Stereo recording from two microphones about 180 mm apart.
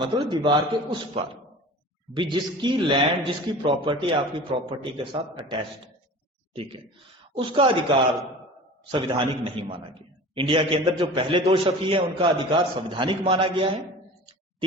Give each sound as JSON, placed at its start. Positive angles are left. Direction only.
{"t": 0.1, "sound": "a man's voice", "side_deg": -25}
{"t": 8.9, "sound": "a man's voice", "side_deg": -25}